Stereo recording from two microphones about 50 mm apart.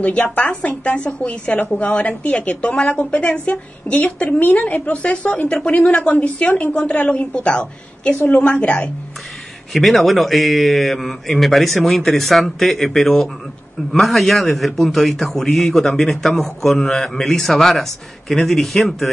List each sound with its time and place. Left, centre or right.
0.4 s speech: left
1.6 s a woman's voice: left
1.9 s speech: left
8.2 s a woman's voice: left
8.5 s speech: left
9.7 s a man's voice: centre